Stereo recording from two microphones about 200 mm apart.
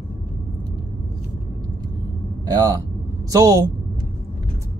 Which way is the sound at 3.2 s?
15° right (ahead or behind).